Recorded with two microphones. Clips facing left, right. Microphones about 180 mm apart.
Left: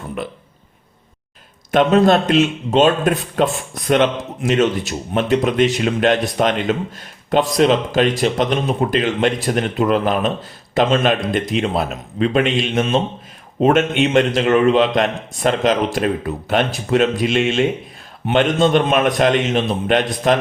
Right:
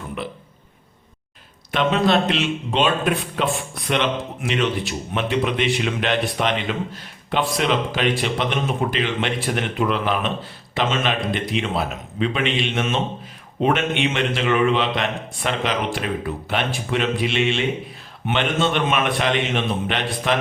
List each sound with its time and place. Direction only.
1.7 s a man's voice: 45° left (ahead or behind)